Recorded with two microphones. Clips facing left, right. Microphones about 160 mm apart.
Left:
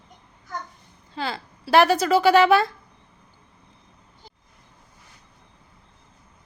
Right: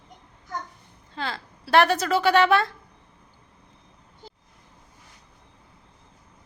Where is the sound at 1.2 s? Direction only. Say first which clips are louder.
Left 2 dB; 5° left (ahead or behind).